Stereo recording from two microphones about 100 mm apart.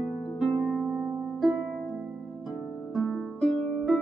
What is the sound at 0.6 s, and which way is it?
Harp, 15° right (ahead or behind).